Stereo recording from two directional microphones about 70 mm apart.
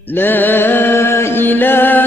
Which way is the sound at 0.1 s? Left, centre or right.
Left.